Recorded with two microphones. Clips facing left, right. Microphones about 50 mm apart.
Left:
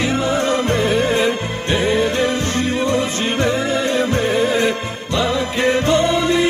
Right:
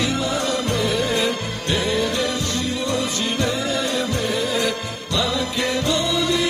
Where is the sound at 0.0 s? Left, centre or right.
Left.